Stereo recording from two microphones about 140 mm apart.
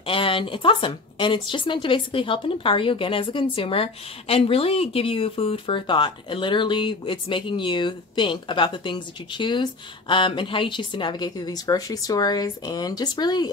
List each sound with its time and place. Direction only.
0.0 s speech: 40° left (ahead or behind)